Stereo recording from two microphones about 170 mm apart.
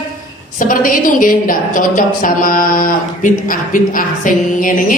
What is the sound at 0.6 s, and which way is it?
A woman's voice, 55° left (ahead or behind).